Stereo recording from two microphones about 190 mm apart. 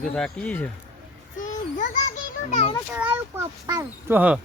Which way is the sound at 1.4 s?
45° left (ahead or behind).